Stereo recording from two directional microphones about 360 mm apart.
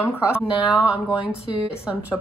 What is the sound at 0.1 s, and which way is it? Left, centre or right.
Speech, centre.